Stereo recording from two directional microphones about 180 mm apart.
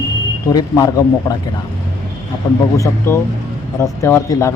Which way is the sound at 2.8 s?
15° left (ahead or behind).